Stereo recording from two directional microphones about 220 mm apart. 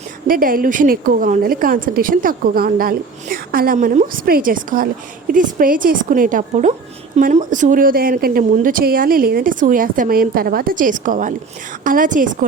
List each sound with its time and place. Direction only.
0.3 s a woman's voice: 40° right (ahead or behind)